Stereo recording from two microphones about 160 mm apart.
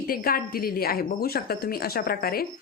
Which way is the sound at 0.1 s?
65° left (ahead or behind).